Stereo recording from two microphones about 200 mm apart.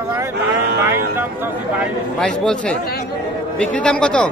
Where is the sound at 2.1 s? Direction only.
5° left (ahead or behind).